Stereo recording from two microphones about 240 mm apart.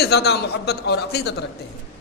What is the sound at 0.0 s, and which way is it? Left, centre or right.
A man's voice, left.